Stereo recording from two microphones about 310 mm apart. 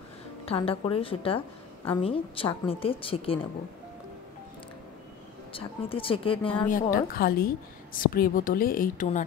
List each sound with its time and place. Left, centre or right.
0.5 s a woman's voice: centre
5.5 s a woman's voice: centre
6.9 s a woman's voice: left